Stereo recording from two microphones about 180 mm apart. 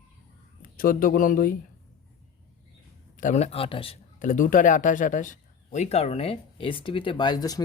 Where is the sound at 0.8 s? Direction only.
50° left (ahead or behind).